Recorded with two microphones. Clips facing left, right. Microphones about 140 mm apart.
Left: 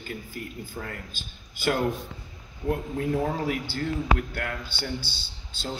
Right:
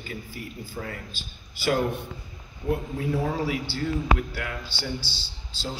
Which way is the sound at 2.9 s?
50° left (ahead or behind).